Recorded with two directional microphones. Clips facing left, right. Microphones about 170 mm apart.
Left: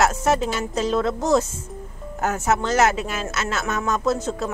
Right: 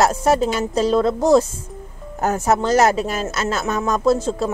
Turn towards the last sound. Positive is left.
turn(degrees=-30)  # may be behind; listen again after turning